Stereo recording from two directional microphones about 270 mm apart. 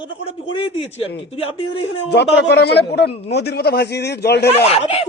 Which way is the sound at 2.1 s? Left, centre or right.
Left.